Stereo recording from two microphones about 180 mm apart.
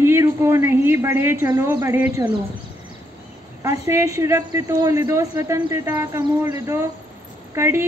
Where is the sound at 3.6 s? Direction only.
15° right (ahead or behind).